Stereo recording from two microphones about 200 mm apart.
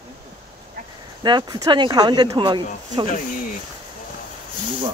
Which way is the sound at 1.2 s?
20° right (ahead or behind).